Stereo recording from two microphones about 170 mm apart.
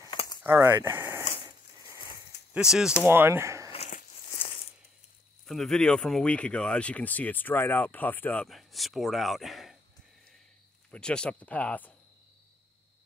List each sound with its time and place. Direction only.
0.1 s keys jangling: 25° left (ahead or behind)
0.4 s speech: 15° right (ahead or behind)
2.5 s speech: 5° right (ahead or behind)
3.1 s speech: 15° right (ahead or behind)
5.5 s speech: 5° left (ahead or behind)
8.5 s speech: centre (ahead or behind)
10.9 s speech: 5° left (ahead or behind)